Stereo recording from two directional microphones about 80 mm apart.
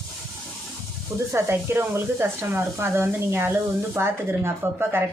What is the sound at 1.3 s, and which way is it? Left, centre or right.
Speech, right.